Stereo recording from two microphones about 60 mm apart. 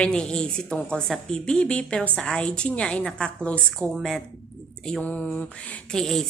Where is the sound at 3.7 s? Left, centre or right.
Centre.